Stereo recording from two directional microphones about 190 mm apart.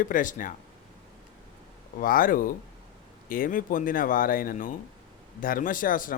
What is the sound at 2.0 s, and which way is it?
Speech, 50° left (ahead or behind).